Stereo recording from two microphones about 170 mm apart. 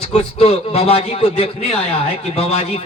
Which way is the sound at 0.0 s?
35° left (ahead or behind).